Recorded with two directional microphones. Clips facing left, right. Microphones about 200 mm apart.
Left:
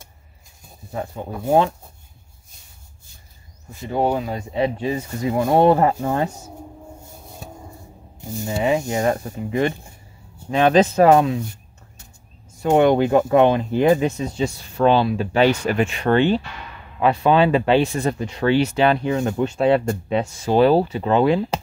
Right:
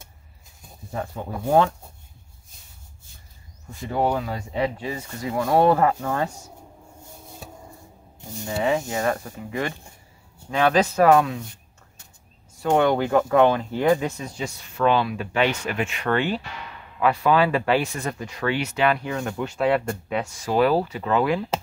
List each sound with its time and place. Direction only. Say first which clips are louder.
3.9 s speech: left 3 dB; 20° left (ahead or behind)
8.5 s speech: left 3 dB; 20° left (ahead or behind)
12.6 s speech: left 4 dB; 20° left (ahead or behind)